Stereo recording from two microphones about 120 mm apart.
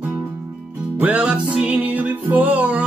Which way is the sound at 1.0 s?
10° right (ahead or behind).